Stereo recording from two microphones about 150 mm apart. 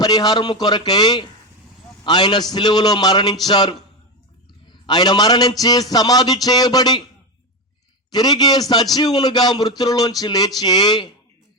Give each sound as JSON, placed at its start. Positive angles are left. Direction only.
{"t": 0.0, "sound": "a man's voice", "side_deg": 25}
{"t": 8.1, "sound": "a man's voice", "side_deg": 25}